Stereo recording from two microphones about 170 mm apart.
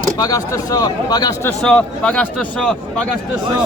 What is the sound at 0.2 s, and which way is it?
Speech, 20° left (ahead or behind).